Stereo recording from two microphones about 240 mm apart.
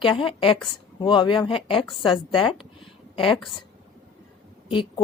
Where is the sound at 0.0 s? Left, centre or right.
Left.